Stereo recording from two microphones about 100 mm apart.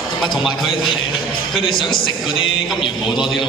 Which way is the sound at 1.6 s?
55° left (ahead or behind).